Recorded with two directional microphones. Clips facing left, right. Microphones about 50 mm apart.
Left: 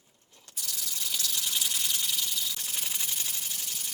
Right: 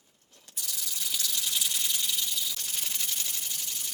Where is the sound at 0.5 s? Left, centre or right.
Centre.